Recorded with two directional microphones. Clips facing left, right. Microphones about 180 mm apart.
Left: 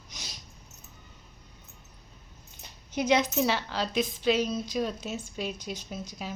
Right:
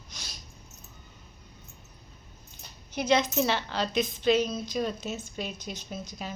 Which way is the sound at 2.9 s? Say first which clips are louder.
Even; 15° left (ahead or behind).